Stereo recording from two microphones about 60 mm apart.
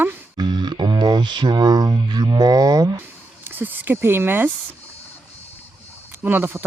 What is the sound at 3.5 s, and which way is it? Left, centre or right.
Speech, right.